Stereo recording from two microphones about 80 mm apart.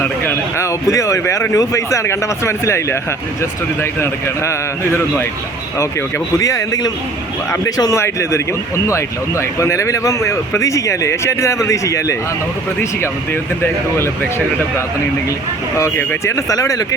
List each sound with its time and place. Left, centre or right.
0.6 s speech: left
6.4 s speech: left
7.9 s speech: left
13.9 s speech: left
16.0 s speech: left